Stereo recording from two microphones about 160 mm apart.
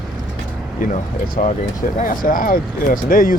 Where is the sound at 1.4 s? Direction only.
55° left (ahead or behind).